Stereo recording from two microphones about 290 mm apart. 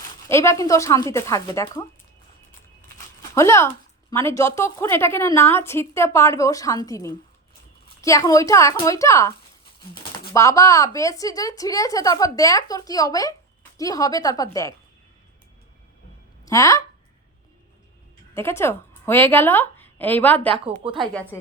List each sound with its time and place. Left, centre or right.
0.3 s a woman's voice: centre
3.3 s a woman's voice: centre
16.5 s a woman's voice: centre
18.3 s a woman's voice: centre
20.7 s a woman's voice: centre
21.0 s speech: centre